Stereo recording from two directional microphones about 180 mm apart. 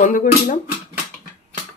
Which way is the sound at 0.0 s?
45° left (ahead or behind).